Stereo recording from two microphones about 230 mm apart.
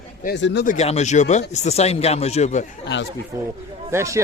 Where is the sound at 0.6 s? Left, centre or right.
Left.